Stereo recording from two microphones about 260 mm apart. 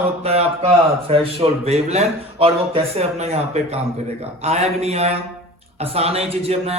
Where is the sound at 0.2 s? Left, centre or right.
Right.